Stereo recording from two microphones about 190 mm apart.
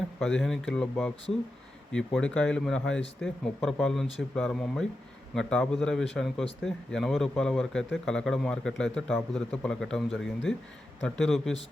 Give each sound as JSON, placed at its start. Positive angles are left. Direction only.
{"t": 0.2, "sound": "speech", "side_deg": 5}